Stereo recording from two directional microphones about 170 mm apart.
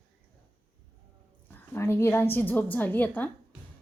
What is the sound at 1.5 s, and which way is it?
A woman's voice, 15° left (ahead or behind).